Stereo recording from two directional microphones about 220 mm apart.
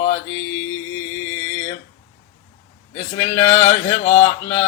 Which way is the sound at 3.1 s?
10° left (ahead or behind).